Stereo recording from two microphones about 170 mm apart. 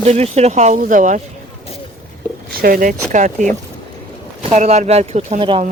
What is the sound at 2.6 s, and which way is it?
Speech, 55° right (ahead or behind).